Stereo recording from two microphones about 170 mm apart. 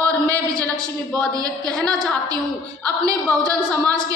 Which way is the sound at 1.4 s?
20° right (ahead or behind).